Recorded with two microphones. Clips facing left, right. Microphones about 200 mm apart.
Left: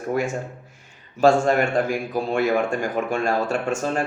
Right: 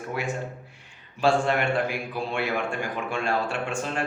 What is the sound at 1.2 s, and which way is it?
A man's voice, 45° left (ahead or behind).